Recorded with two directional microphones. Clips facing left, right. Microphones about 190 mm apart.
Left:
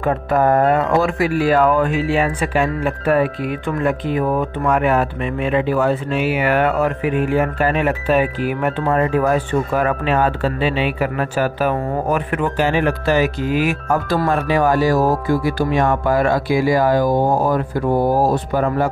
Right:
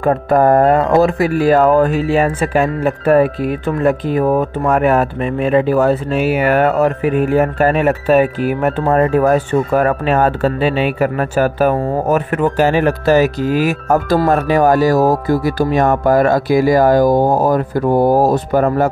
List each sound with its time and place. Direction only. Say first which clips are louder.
0.0 s speech: right 4 dB; 45° right (ahead or behind)